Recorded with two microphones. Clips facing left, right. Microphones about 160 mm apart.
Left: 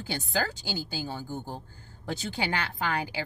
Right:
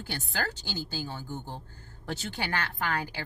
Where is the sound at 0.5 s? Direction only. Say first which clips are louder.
Left 2 dB; 10° left (ahead or behind).